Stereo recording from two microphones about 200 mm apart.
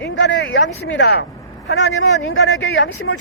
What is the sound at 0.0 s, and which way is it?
Speech, 65° left (ahead or behind).